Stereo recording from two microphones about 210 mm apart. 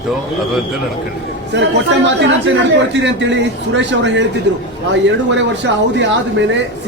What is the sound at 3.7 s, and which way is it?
Speech, 60° right (ahead or behind).